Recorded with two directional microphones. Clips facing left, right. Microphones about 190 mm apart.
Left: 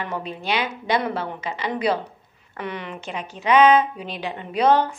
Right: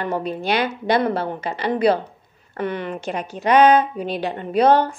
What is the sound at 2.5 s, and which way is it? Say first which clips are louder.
A woman's voice: right 6 dB; 50° right (ahead or behind).